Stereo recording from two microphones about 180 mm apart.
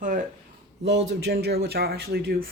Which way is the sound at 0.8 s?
75° right (ahead or behind).